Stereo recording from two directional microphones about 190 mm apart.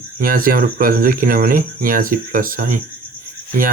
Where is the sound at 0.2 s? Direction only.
50° right (ahead or behind).